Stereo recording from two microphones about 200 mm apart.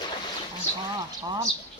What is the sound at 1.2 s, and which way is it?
Speech, 20° right (ahead or behind).